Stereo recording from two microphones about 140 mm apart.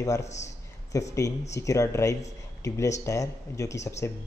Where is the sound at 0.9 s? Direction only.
20° left (ahead or behind).